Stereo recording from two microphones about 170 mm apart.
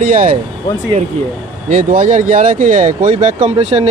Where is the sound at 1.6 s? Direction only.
50° right (ahead or behind).